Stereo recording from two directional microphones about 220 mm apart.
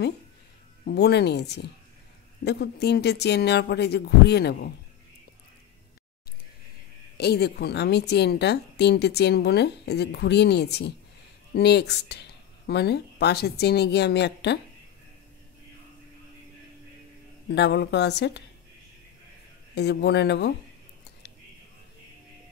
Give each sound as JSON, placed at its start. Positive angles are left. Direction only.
{"t": 0.8, "sound": "a woman's voice", "side_deg": 45}
{"t": 7.2, "sound": "a woman's voice", "side_deg": 50}
{"t": 17.5, "sound": "a woman's voice", "side_deg": 50}
{"t": 19.7, "sound": "a woman's voice", "side_deg": 50}